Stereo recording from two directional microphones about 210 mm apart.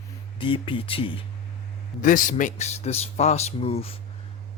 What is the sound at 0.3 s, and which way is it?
Speech, 25° left (ahead or behind).